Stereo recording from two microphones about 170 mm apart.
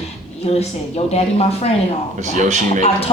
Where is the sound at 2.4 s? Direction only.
45° right (ahead or behind).